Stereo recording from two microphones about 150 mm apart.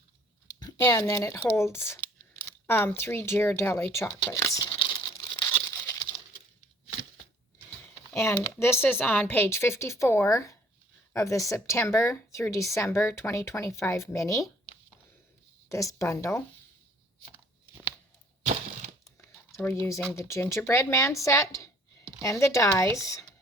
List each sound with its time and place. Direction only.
0.9 s speech: 20° left (ahead or behind)
2.4 s a sound: 15° left (ahead or behind)
3.0 s speech: 15° left (ahead or behind)
4.6 s crumpling: 35° left (ahead or behind)
5.5 s a sound: 20° left (ahead or behind)
8.1 s speech: 20° left (ahead or behind)
15.7 s speech: 20° left (ahead or behind)
19.6 s speech: 15° left (ahead or behind)